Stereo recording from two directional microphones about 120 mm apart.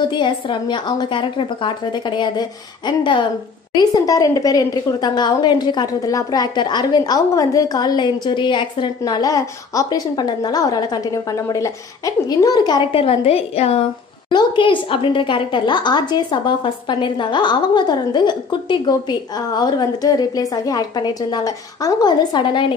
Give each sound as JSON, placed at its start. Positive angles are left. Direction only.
{"t": 0.1, "sound": "a woman's voice", "side_deg": 40}
{"t": 3.7, "sound": "a woman's voice", "side_deg": 30}
{"t": 12.9, "sound": "a woman's voice", "side_deg": 55}
{"t": 14.3, "sound": "a woman's voice", "side_deg": 45}